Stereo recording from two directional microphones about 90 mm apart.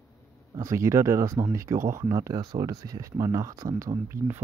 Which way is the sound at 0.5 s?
35° right (ahead or behind).